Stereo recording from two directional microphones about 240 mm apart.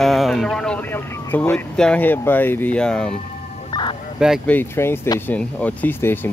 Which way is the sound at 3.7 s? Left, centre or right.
Centre.